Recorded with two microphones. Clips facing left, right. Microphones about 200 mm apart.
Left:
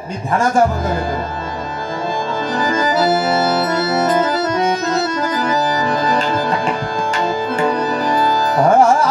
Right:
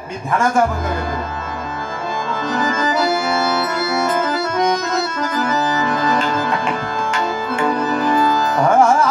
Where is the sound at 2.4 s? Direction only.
35° left (ahead or behind).